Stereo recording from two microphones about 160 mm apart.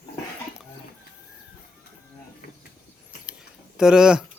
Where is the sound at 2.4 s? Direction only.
65° left (ahead or behind).